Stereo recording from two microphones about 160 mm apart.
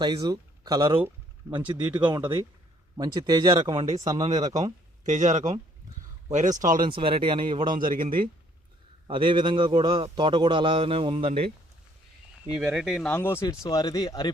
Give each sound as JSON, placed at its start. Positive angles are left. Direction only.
{"t": 0.0, "sound": "speech", "side_deg": -25}
{"t": 2.2, "sound": "a man's voice", "side_deg": -15}
{"t": 4.2, "sound": "speech", "side_deg": -45}
{"t": 6.8, "sound": "a man's voice", "side_deg": -35}
{"t": 7.9, "sound": "speech", "side_deg": -60}
{"t": 9.0, "sound": "a man's voice", "side_deg": -30}
{"t": 12.5, "sound": "speech", "side_deg": -5}
{"t": 13.1, "sound": "speech", "side_deg": 15}